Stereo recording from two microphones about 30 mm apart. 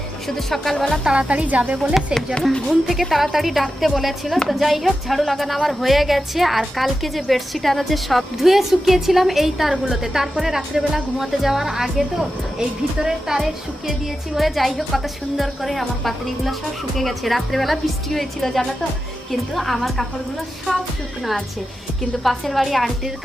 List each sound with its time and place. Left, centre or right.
0.3 s speech: centre
1.1 s a woman's voice: right
2.6 s a woman's voice: centre
14.3 s speech: centre
22.2 s speech: centre